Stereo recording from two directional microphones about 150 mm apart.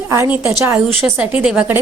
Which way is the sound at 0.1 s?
15° right (ahead or behind).